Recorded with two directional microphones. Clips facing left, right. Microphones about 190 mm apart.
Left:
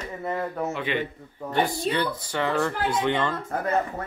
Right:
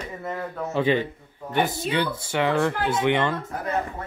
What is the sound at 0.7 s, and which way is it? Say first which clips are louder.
A woman's voice: right 6 dB; 35° right (ahead or behind).